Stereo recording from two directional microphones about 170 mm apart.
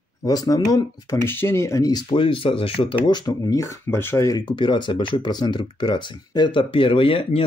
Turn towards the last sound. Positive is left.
turn(degrees=30)  # may be behind; listen again after turning